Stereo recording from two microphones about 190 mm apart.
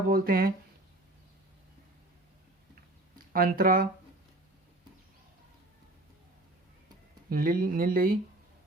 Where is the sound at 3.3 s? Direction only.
50° right (ahead or behind).